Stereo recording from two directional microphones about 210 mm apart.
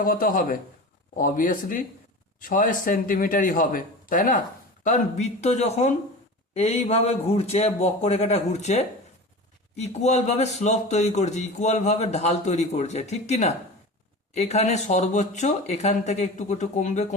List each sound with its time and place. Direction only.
0.0 s speech: 40° left (ahead or behind)